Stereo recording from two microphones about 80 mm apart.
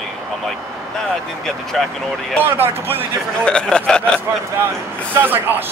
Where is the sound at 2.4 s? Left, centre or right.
Right.